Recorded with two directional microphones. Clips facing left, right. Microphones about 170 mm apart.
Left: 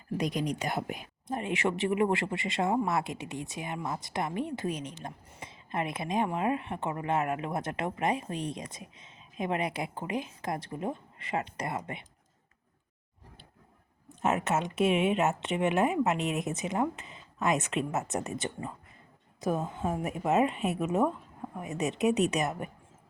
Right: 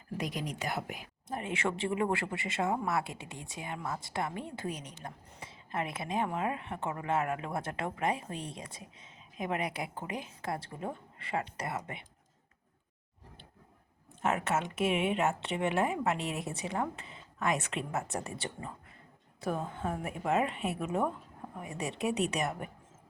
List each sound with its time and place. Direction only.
0.2 s a woman's voice: 20° left (ahead or behind)
3.1 s speech: 80° left
3.4 s a woman's voice: 15° left (ahead or behind)
14.2 s a woman's voice: 25° left (ahead or behind)